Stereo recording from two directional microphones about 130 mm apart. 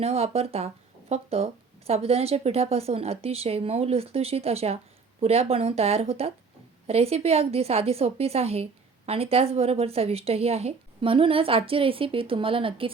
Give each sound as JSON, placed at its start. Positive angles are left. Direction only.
{"t": 0.0, "sound": "a woman's voice", "side_deg": -50}